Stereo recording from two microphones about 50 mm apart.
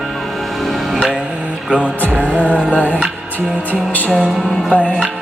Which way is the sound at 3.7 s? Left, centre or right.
Left.